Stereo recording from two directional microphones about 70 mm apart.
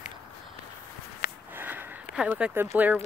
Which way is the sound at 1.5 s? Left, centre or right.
Right.